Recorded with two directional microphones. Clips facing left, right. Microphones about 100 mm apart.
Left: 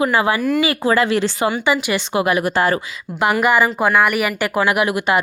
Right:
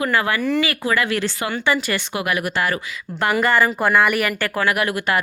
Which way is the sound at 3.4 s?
10° left (ahead or behind).